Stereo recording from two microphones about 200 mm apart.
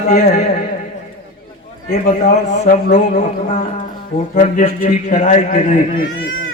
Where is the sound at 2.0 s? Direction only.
40° left (ahead or behind).